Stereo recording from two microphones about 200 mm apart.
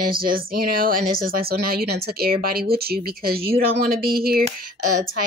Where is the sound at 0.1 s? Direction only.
45° right (ahead or behind).